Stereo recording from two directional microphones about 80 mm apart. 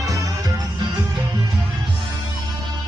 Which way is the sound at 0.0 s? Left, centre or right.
Right.